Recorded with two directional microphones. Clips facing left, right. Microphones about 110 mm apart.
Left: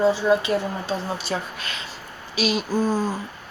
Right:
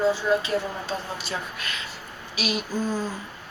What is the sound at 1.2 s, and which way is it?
A woman's voice, 30° left (ahead or behind).